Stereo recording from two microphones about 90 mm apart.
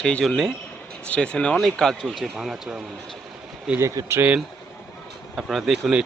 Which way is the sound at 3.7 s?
35° right (ahead or behind).